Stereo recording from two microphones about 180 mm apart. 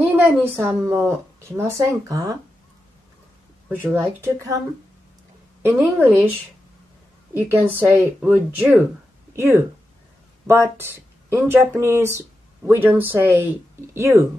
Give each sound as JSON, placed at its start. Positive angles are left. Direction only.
{"t": 0.4, "sound": "speech", "side_deg": -10}
{"t": 3.6, "sound": "speech", "side_deg": -10}
{"t": 5.6, "sound": "speech", "side_deg": -10}
{"t": 7.3, "sound": "speech", "side_deg": -10}